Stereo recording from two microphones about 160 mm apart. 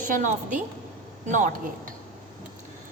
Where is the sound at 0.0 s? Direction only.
55° right (ahead or behind).